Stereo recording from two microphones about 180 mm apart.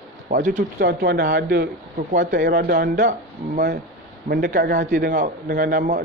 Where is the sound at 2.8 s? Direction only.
45° right (ahead or behind).